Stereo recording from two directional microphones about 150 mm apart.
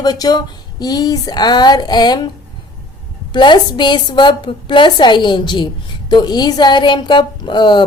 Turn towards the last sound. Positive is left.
turn(degrees=30)  # may be behind; listen again after turning